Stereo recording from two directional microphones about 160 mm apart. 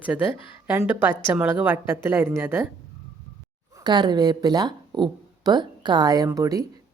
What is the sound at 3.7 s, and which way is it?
Speech, 25° right (ahead or behind).